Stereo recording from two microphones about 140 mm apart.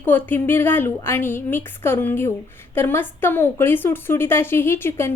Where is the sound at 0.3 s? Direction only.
15° left (ahead or behind).